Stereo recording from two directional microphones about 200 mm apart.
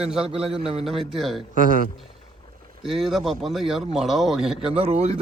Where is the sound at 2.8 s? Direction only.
Centre (ahead or behind).